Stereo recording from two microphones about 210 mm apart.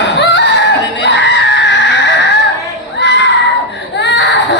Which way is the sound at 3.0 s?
60° left (ahead or behind).